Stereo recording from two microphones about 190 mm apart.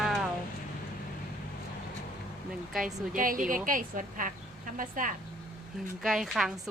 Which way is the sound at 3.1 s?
45° right (ahead or behind).